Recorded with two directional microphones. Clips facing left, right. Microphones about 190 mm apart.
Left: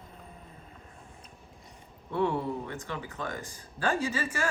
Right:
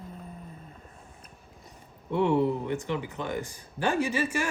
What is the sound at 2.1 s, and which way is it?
Speech, 20° right (ahead or behind).